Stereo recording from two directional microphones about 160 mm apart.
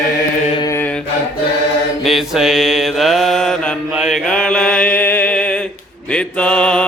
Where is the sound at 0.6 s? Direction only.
20° left (ahead or behind).